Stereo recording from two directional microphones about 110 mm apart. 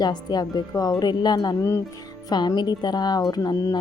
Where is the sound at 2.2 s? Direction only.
40° left (ahead or behind).